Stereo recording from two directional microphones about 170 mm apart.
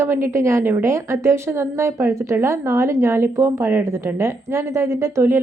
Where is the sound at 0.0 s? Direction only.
15° right (ahead or behind).